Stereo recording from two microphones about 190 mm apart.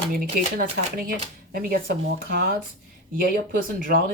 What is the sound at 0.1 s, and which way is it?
Speech, 50° right (ahead or behind).